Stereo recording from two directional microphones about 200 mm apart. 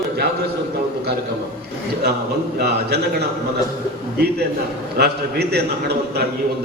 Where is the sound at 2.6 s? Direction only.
55° right (ahead or behind).